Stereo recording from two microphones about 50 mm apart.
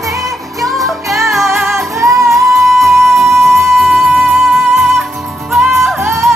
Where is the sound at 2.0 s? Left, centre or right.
Right.